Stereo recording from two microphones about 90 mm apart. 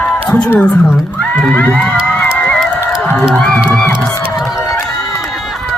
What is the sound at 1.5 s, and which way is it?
Speech, 20° left (ahead or behind).